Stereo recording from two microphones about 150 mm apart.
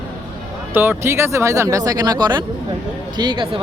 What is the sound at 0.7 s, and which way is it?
Speech, 15° right (ahead or behind).